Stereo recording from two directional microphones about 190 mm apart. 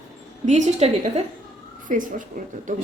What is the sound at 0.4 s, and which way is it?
A woman's voice, 40° right (ahead or behind).